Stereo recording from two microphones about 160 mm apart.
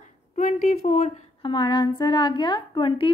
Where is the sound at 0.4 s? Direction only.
50° left (ahead or behind).